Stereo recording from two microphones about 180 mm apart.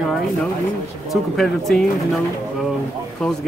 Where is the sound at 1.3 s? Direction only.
Centre (ahead or behind).